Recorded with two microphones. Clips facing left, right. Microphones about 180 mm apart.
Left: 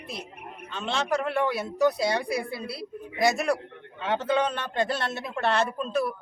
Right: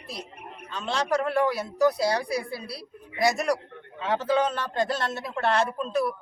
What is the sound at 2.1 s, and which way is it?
Speech, 25° left (ahead or behind).